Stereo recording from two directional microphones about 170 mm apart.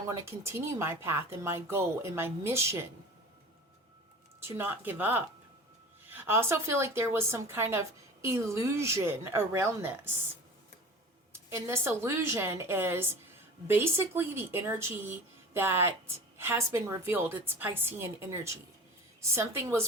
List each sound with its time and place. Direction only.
0.1 s a woman's voice: 15° right (ahead or behind)
4.4 s a woman's voice: 15° right (ahead or behind)
11.3 s a woman's voice: 15° right (ahead or behind)